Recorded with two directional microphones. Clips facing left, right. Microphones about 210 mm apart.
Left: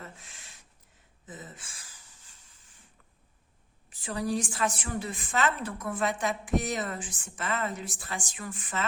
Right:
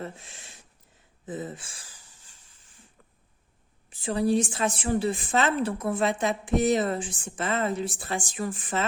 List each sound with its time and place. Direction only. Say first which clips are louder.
0.0 s a sound: right 9 dB; 30° right (ahead or behind)
1.3 s speech: right 11 dB; 30° right (ahead or behind)
3.8 s a woman's voice: right 7 dB; 30° right (ahead or behind)